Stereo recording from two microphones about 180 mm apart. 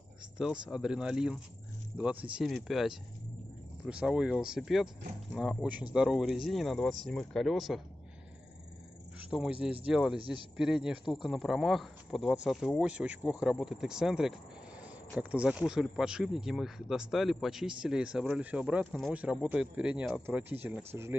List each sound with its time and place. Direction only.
0.4 s speech: 5° right (ahead or behind)
9.2 s speech: 5° right (ahead or behind)